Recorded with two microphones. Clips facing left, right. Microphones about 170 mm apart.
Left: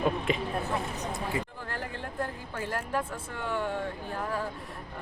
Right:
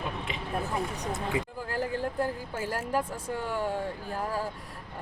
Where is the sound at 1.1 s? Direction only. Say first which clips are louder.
Right 2 dB; 15° right (ahead or behind).